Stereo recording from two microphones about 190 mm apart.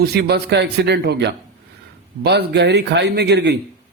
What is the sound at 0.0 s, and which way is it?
A man's voice, 55° right (ahead or behind).